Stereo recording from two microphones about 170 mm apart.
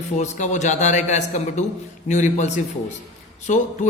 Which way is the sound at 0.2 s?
45° left (ahead or behind).